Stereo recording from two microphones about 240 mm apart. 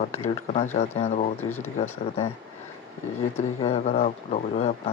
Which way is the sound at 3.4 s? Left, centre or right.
Left.